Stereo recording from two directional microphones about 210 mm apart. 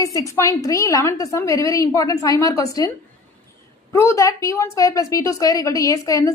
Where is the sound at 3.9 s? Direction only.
10° left (ahead or behind).